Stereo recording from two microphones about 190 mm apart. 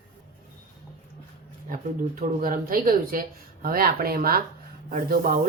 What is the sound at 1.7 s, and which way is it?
Speech, 45° right (ahead or behind).